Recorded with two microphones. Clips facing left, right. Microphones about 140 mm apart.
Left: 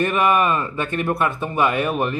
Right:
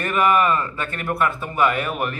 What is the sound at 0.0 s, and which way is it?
Speech, 20° left (ahead or behind).